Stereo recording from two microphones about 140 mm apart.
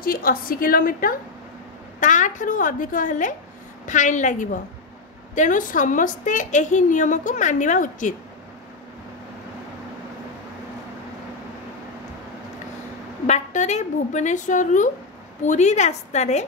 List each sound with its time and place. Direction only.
0.0 s a woman's voice: 90° left
2.0 s a woman's voice: 65° left (ahead or behind)
13.3 s a woman's voice: 55° left (ahead or behind)